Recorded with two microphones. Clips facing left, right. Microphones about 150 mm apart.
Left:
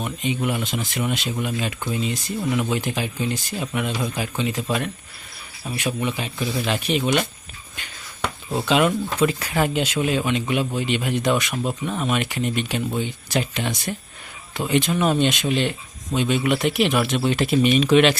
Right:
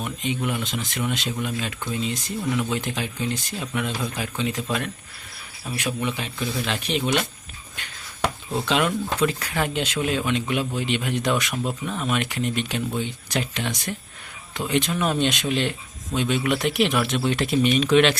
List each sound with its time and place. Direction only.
0.0 s a man's voice: 5° left (ahead or behind)
7.8 s a sound: 5° left (ahead or behind)
9.2 s a man's voice: 5° left (ahead or behind)